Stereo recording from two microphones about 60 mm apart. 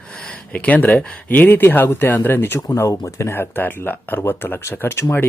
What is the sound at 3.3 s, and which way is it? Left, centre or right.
Speech, left.